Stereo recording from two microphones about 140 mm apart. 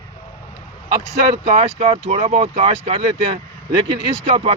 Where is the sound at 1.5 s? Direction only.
45° right (ahead or behind).